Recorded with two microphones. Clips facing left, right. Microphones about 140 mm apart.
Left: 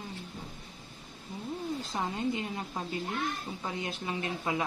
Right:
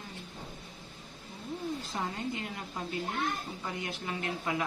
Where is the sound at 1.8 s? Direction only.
20° left (ahead or behind).